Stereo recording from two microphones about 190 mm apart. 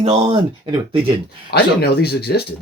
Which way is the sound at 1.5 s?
55° left (ahead or behind).